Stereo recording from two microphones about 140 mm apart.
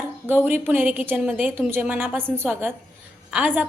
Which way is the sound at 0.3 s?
15° right (ahead or behind).